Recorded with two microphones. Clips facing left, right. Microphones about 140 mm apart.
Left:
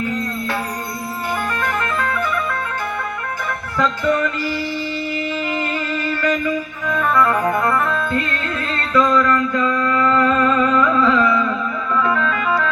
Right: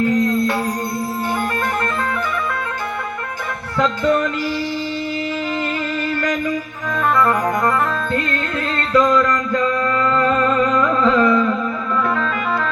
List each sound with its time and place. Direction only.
1.6 s music: 35° right (ahead or behind)
8.9 s music: 40° right (ahead or behind)